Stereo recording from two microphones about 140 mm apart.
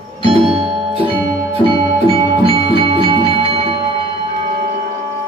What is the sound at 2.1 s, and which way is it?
Music, 40° right (ahead or behind).